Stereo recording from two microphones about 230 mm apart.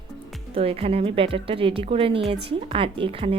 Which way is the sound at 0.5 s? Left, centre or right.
Right.